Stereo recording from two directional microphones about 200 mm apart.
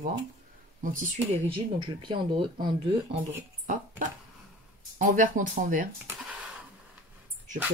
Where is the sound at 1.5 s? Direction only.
25° right (ahead or behind).